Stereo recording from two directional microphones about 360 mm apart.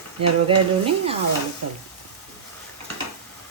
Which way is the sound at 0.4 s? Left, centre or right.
Centre.